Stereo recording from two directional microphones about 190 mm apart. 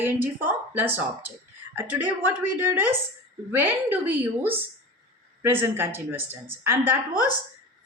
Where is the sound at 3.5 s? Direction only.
10° right (ahead or behind).